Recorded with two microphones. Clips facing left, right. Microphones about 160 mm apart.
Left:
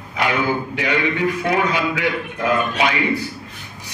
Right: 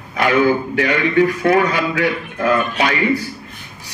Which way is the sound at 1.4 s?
45° right (ahead or behind).